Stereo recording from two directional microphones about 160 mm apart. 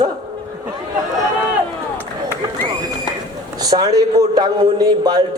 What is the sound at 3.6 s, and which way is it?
A man's voice, 25° right (ahead or behind).